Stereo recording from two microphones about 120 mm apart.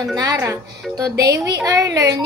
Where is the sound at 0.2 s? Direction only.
25° right (ahead or behind).